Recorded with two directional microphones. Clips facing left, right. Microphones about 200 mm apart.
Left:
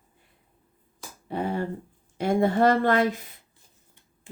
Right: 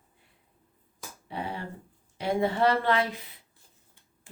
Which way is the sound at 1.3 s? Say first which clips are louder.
Left 8 dB; 45° left (ahead or behind).